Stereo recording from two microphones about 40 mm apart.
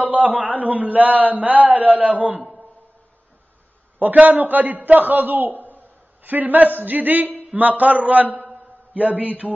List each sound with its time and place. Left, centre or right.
0.0 s a man's voice: right
4.0 s a man's voice: right